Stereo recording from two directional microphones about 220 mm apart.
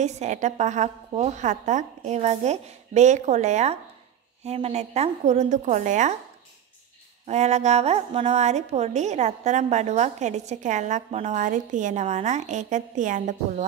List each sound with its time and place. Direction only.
0.0 s a woman's voice: 30° right (ahead or behind)
7.2 s a woman's voice: 30° right (ahead or behind)